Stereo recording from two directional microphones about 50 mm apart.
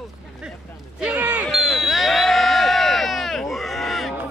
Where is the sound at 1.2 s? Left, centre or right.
Right.